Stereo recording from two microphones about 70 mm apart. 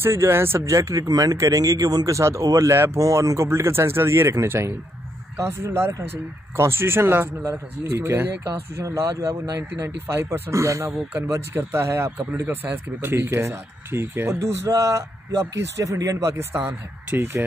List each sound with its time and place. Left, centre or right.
0.0 s speech: right
8.7 s speech: right
16.5 s speech: right